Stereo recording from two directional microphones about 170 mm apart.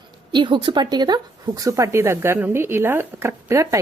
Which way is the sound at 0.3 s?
30° right (ahead or behind).